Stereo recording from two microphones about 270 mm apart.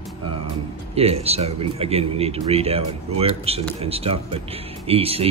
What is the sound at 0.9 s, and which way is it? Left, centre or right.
A man's voice, right.